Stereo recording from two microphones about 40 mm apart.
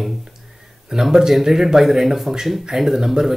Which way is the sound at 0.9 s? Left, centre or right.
Centre.